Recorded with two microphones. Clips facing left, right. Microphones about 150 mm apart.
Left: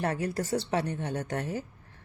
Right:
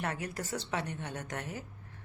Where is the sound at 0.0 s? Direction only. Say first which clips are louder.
Left 7 dB; 35° left (ahead or behind).